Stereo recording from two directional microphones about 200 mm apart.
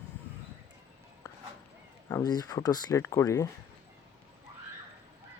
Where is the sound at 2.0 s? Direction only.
20° left (ahead or behind).